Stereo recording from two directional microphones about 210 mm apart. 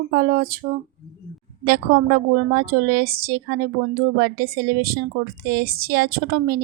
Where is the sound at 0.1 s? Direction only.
50° right (ahead or behind).